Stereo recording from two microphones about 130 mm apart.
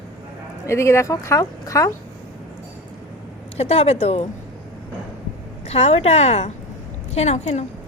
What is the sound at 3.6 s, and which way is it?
Speech, 55° left (ahead or behind).